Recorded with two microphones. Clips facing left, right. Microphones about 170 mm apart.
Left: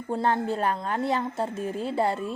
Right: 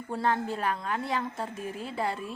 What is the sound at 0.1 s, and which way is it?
A woman's voice, 30° left (ahead or behind).